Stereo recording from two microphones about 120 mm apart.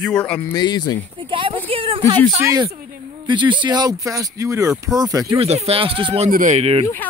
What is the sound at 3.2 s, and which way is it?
Speech, 40° right (ahead or behind).